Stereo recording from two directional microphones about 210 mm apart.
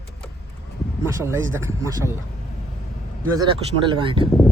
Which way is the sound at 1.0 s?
15° right (ahead or behind).